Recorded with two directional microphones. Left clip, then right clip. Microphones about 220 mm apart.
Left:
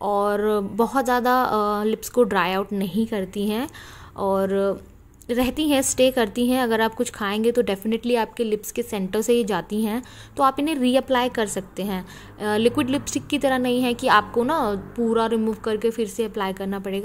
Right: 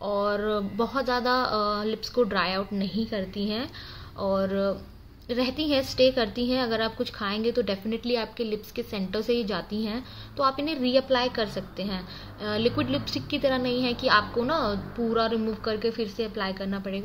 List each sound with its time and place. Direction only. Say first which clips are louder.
0.0 s a woman's voice: left 5 dB; 55° left (ahead or behind)